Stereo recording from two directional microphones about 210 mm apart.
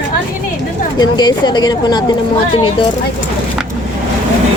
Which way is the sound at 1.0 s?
20° left (ahead or behind).